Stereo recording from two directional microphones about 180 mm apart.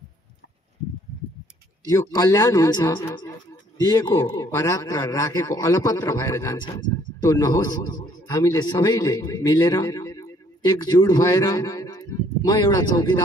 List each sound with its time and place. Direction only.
1.9 s a man's voice: 20° left (ahead or behind)